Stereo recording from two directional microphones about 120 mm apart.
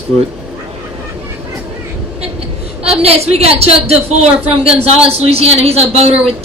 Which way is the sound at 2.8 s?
60° right (ahead or behind).